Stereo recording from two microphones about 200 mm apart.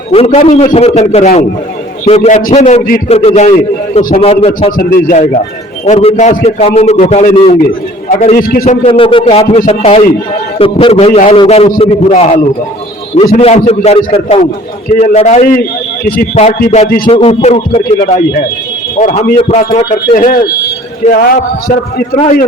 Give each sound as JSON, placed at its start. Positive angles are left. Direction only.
{"t": 0.1, "sound": "a man's voice", "side_deg": 35}
{"t": 4.8, "sound": "a man's voice", "side_deg": 45}
{"t": 5.8, "sound": "a man's voice", "side_deg": 30}
{"t": 18.0, "sound": "a man's voice", "side_deg": 45}